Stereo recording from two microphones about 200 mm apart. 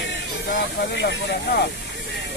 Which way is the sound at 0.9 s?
55° left (ahead or behind).